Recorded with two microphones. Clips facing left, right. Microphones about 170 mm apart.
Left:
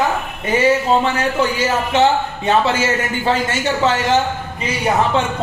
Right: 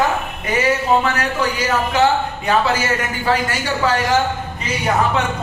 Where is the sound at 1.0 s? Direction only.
25° left (ahead or behind).